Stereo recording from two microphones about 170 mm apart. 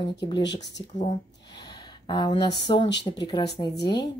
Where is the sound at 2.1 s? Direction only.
25° left (ahead or behind).